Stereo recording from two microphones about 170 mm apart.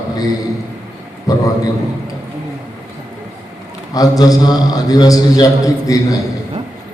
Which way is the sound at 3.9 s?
20° left (ahead or behind).